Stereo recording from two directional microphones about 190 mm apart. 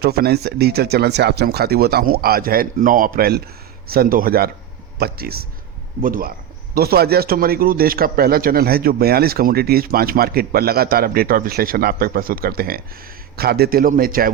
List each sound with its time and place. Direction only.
0.0 s a man's voice: 55° right (ahead or behind)